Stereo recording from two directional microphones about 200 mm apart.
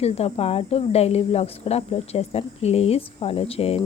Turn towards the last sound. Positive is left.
turn(degrees=30)  # may be behind; listen again after turning